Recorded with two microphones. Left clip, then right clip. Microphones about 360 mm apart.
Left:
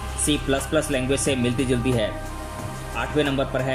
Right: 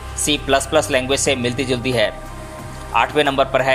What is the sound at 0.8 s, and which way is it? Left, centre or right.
Speech, centre.